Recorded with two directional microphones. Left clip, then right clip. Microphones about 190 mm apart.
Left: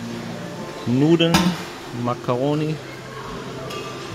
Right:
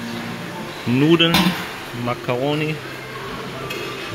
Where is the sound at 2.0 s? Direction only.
35° left (ahead or behind).